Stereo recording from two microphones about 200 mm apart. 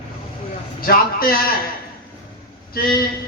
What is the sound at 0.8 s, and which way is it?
Speech, 45° left (ahead or behind).